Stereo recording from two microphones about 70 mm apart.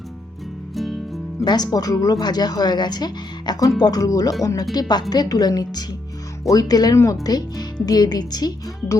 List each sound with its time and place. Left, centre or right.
0.8 s music: centre
1.5 s a woman's voice: left
3.8 s speech: left
4.7 s a woman's voice: left
6.9 s speech: left
7.3 s a woman's voice: left